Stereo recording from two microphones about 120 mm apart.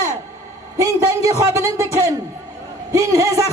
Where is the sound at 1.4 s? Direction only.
25° right (ahead or behind).